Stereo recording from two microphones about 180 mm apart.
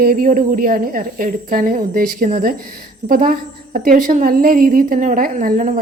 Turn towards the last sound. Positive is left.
turn(degrees=-50)  # may be behind; listen again after turning